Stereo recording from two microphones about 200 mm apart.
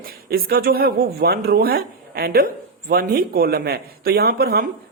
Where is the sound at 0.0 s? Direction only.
45° right (ahead or behind).